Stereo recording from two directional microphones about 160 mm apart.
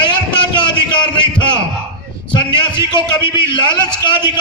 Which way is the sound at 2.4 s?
30° left (ahead or behind).